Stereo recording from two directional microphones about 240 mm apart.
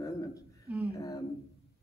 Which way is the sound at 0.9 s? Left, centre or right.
Centre.